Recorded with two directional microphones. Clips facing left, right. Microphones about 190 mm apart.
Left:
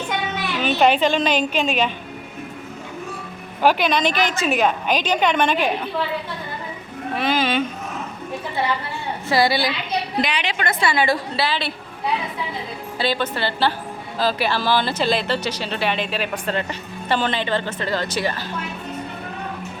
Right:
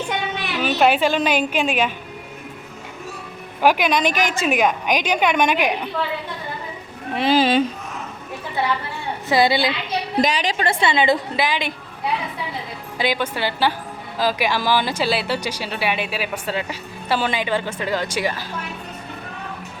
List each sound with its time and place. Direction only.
0.6 s speech: 5° right (ahead or behind)
3.6 s speech: 10° right (ahead or behind)
7.1 s speech: 25° right (ahead or behind)
9.3 s a woman's voice: 20° right (ahead or behind)
10.2 s a woman's voice: 40° right (ahead or behind); by 11.7 s 15° right (ahead or behind)
13.0 s speech: 10° right (ahead or behind)